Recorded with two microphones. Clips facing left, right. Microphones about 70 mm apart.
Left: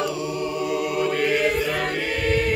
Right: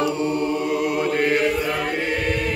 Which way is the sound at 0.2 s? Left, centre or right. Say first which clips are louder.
Right 4 dB; right.